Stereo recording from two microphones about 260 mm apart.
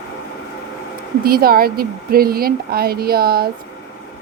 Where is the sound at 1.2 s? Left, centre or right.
Right.